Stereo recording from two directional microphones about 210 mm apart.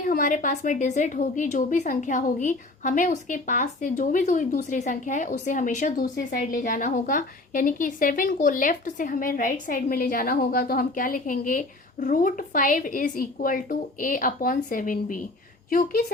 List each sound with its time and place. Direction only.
0.0 s a woman's voice: 40° left (ahead or behind)